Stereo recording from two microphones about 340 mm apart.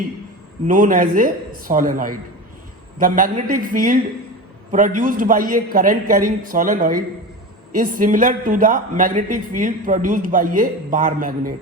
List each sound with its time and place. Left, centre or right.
0.7 s a man's voice: right